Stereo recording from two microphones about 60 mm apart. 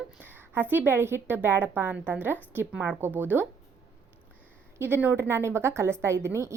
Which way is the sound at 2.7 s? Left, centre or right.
Right.